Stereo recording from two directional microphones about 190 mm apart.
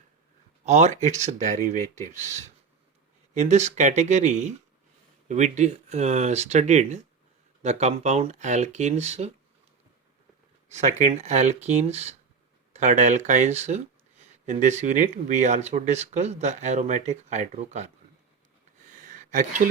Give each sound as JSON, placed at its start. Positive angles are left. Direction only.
{"t": 0.6, "sound": "speech", "side_deg": -35}
{"t": 10.7, "sound": "speech", "side_deg": -35}
{"t": 19.0, "sound": "a sound", "side_deg": -40}